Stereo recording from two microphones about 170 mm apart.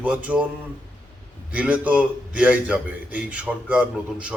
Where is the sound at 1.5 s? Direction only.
10° right (ahead or behind).